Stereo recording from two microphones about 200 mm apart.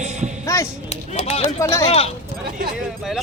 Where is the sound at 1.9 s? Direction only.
30° left (ahead or behind).